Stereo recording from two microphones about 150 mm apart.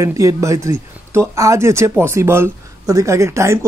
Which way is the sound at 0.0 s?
20° right (ahead or behind).